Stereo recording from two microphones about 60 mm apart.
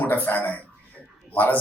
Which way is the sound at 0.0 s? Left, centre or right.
Left.